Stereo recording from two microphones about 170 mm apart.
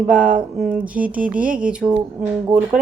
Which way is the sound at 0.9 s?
10° right (ahead or behind).